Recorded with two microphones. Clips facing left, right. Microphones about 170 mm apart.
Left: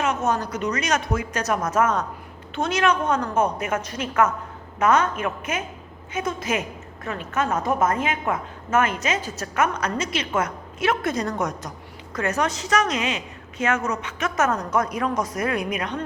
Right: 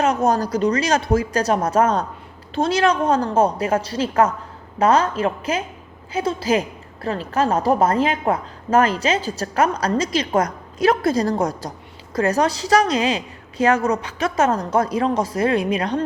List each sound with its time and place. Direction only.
0.0 s a woman's voice: 35° right (ahead or behind)